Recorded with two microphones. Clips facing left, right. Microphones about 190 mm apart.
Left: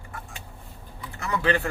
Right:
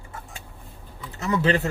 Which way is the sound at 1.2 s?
25° right (ahead or behind).